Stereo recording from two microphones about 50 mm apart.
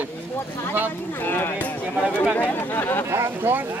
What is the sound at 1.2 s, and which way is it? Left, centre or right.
Speech, left.